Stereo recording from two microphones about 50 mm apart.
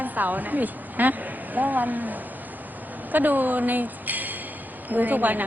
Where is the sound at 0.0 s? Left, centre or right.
Right.